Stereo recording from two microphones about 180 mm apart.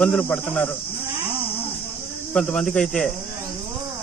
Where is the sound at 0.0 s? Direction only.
5° left (ahead or behind).